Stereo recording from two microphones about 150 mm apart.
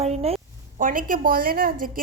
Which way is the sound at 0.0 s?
45° right (ahead or behind).